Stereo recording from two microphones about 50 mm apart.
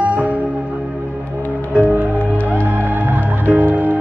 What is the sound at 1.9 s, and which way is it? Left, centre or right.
Music, right.